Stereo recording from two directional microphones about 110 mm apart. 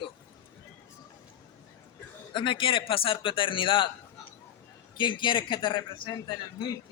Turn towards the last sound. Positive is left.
turn(degrees=45)  # may be behind; listen again after turning